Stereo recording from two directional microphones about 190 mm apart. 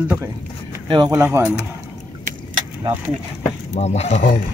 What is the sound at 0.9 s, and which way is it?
Speech, 20° right (ahead or behind).